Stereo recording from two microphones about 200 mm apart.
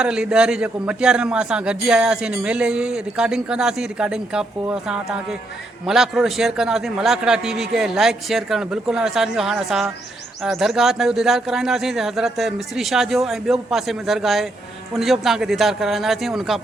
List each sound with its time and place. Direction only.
0.0 s a man's voice: 5° right (ahead or behind)